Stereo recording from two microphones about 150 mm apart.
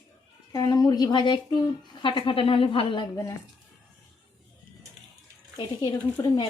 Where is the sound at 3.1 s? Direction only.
20° left (ahead or behind).